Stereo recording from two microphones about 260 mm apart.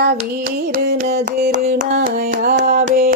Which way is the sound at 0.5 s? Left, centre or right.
Right.